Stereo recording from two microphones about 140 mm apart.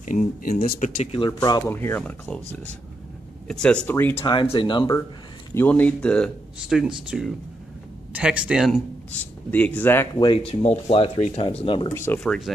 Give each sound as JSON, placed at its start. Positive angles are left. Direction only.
{"t": 0.0, "sound": "speech", "side_deg": 65}
{"t": 0.7, "sound": "speech", "side_deg": 65}
{"t": 1.1, "sound": "speech", "side_deg": 35}
{"t": 1.7, "sound": "speech", "side_deg": 15}
{"t": 3.4, "sound": "speech", "side_deg": 5}
{"t": 3.9, "sound": "speech", "side_deg": 15}
{"t": 4.2, "sound": "speech", "side_deg": 40}
{"t": 5.5, "sound": "speech", "side_deg": 15}
{"t": 9.5, "sound": "speech", "side_deg": 10}
{"t": 10.1, "sound": "speech", "side_deg": 35}
{"t": 11.9, "sound": "speech", "side_deg": 15}
{"t": 12.2, "sound": "speech", "side_deg": 0}